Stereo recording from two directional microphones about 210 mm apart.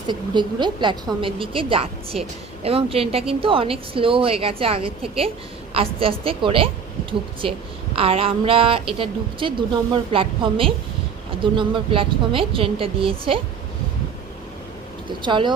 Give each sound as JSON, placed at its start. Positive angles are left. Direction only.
{"t": 0.1, "sound": "speech", "side_deg": -20}
{"t": 15.2, "sound": "speech", "side_deg": -20}